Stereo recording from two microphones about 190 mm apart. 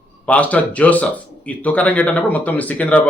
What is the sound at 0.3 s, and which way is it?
Speech, 10° left (ahead or behind).